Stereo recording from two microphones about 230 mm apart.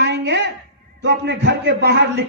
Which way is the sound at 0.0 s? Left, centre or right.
Right.